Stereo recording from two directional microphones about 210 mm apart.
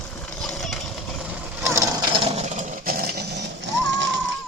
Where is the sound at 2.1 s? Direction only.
35° right (ahead or behind).